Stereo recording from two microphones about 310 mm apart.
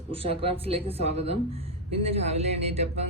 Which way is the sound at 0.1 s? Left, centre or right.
Centre.